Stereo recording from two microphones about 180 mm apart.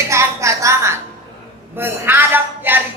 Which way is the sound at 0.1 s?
15° right (ahead or behind).